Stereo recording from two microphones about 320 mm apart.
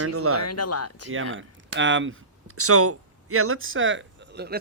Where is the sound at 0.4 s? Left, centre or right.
Left.